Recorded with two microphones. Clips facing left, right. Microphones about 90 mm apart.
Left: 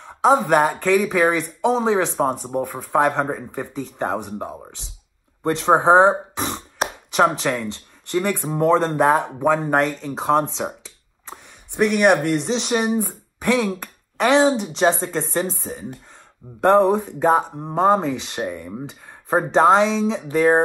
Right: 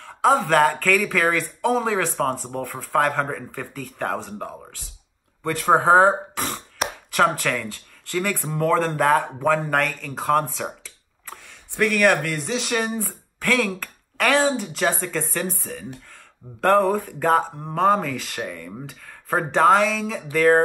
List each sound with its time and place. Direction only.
0.0 s speech: 15° left (ahead or behind)
17.7 s speech: 25° left (ahead or behind)